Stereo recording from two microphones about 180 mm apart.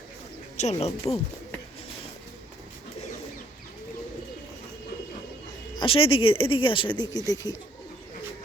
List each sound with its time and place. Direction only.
0.5 s speech: 40° left (ahead or behind)
5.8 s speech: 30° left (ahead or behind)